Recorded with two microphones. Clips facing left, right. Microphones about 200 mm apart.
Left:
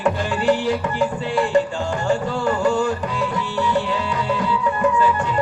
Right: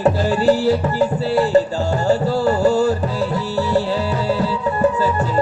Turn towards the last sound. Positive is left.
turn(degrees=-40)  # may be behind; listen again after turning